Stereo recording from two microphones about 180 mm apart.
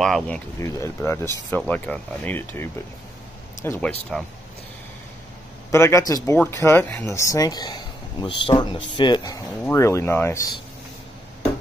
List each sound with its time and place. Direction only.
0.0 s speech: centre (ahead or behind)
0.6 s speech: 15° left (ahead or behind)
4.1 s speech: centre (ahead or behind)
5.7 s speech: 15° left (ahead or behind)